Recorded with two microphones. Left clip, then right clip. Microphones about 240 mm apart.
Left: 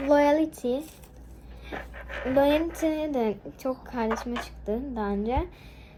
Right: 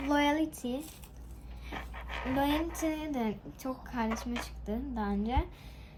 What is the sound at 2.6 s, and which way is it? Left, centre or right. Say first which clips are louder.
Speech: left 6 dB; centre.